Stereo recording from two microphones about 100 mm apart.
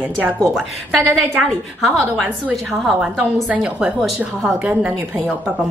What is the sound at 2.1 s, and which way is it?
A woman's voice, 5° right (ahead or behind).